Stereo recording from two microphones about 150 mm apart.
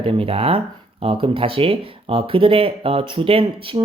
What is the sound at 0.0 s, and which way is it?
Speech, 35° right (ahead or behind).